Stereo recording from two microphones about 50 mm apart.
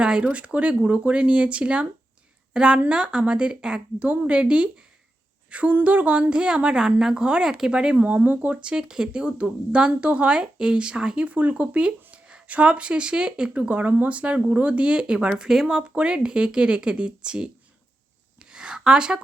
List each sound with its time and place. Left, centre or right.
0.0 s speech: right
7.9 s speech: right
11.3 s speech: right
13.6 s speech: right
18.3 s a sound: centre